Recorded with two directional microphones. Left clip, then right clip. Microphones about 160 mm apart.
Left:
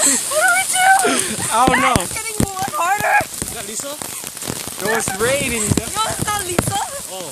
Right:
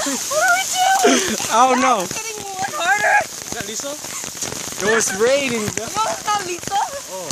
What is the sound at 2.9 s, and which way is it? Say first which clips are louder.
Speech: right 1 dB; 5° right (ahead or behind).